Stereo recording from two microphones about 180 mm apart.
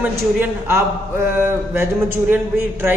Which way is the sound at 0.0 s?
10° right (ahead or behind).